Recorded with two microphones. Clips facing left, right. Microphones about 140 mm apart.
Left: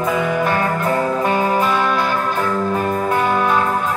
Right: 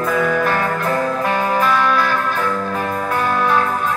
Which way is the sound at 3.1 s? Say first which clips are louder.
Left 1 dB; 15° left (ahead or behind).